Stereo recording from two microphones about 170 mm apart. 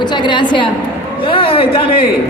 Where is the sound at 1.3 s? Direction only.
30° left (ahead or behind).